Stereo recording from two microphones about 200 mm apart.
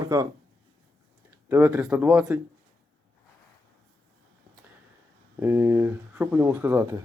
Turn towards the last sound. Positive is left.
turn(degrees=-10)  # may be behind; listen again after turning